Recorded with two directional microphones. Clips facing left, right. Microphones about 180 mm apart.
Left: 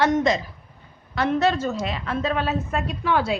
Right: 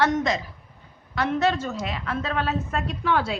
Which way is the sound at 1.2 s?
35° left (ahead or behind).